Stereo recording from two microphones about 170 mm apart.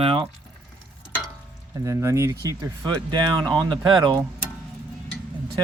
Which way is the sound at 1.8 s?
15° right (ahead or behind).